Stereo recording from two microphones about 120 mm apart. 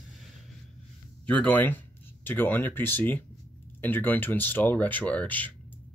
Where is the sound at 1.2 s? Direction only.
10° left (ahead or behind).